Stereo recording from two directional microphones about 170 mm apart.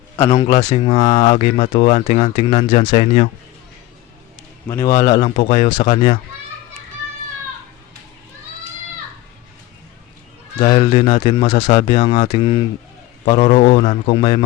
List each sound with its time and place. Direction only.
0.2 s a man's voice: 20° left (ahead or behind)
0.4 s speech: 35° left (ahead or behind)
4.7 s a man's voice: 20° left (ahead or behind)
5.2 s speech: 40° left (ahead or behind)
10.6 s speech: 30° left (ahead or behind)